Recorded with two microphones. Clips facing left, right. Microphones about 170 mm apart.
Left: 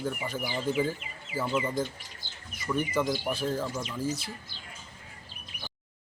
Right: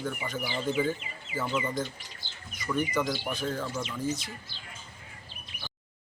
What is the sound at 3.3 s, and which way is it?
Speech, 30° left (ahead or behind).